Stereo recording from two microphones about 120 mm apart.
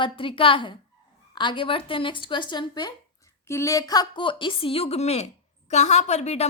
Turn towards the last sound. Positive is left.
turn(degrees=65)  # may be behind; listen again after turning